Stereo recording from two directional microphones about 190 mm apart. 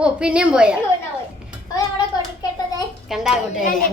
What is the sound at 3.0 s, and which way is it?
Speech, centre (ahead or behind).